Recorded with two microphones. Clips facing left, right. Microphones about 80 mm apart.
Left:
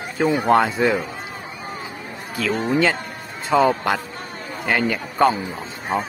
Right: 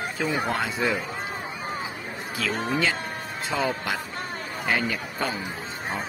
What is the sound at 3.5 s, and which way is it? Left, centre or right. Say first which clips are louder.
Speech: left 11 dB; left.